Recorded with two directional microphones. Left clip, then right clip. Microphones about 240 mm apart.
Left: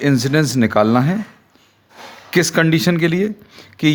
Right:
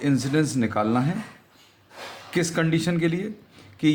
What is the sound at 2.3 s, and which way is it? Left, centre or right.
Speech, left.